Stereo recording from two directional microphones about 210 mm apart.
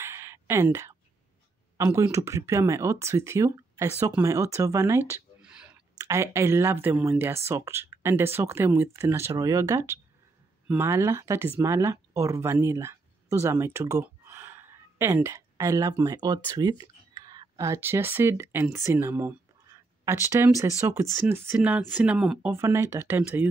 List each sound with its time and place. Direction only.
0.0 s a sound: 15° right (ahead or behind)
1.8 s speech: 15° right (ahead or behind)
5.9 s speech: 15° right (ahead or behind)